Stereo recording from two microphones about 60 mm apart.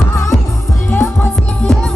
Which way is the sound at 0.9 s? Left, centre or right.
Left.